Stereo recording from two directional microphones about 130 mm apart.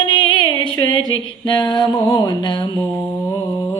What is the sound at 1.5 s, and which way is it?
Music, 35° left (ahead or behind).